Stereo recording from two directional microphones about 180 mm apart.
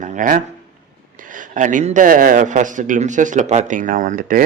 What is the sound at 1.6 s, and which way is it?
A man's voice, 45° right (ahead or behind).